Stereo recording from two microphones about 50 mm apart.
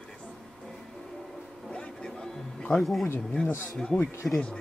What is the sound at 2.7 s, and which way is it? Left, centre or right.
Speech, centre.